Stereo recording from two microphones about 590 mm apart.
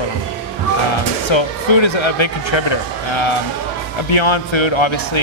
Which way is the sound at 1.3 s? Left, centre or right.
Left.